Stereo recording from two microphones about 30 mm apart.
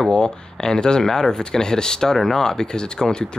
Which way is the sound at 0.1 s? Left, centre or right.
Left.